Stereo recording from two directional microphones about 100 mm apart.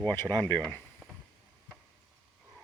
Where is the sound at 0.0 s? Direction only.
20° left (ahead or behind).